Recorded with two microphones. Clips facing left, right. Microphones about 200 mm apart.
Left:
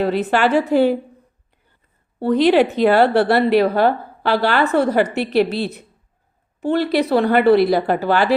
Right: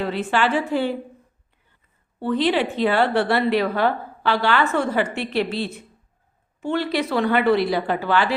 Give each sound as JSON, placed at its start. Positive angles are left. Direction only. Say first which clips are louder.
{"t": 0.0, "sound": "a woman's voice", "louder": "left 5 dB", "side_deg": 40}
{"t": 2.1, "sound": "a woman's voice", "louder": "left 7 dB", "side_deg": 40}